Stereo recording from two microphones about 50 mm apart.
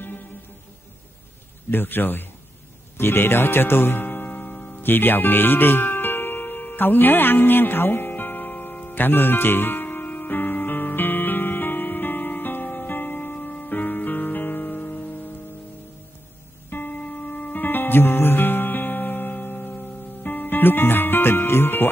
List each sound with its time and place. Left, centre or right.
1.7 s speech: left
4.0 s music: left
4.8 s speech: left
8.1 s music: left
16.7 s music: left
20.5 s speech: left